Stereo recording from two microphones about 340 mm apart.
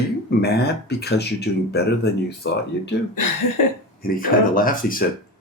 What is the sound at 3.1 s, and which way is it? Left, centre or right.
Speech, left.